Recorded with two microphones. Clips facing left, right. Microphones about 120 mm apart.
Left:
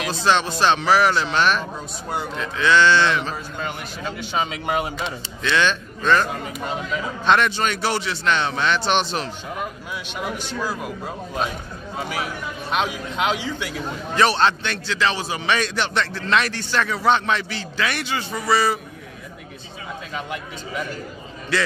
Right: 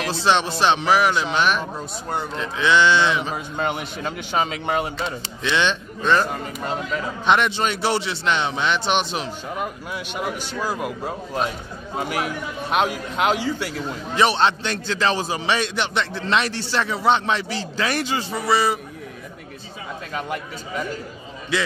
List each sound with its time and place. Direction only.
0.1 s a man's voice: 25° right (ahead or behind)
4.6 s speech: 15° left (ahead or behind)
5.4 s a man's voice: 20° right (ahead or behind)
6.6 s speech: 5° left (ahead or behind)
7.2 s speech: 20° right (ahead or behind)
12.7 s speech: 5° right (ahead or behind)
14.1 s a man's voice: 20° right (ahead or behind)
14.6 s speech: 35° right (ahead or behind)
15.2 s a man's voice: 25° right (ahead or behind)
18.3 s a man's voice: 20° right (ahead or behind)
20.2 s speech: centre (ahead or behind)